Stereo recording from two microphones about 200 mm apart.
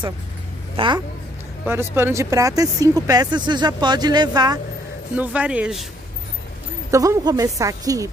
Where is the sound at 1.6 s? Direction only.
10° right (ahead or behind).